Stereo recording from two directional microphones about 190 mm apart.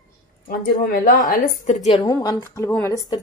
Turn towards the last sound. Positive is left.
turn(degrees=20)  # may be behind; listen again after turning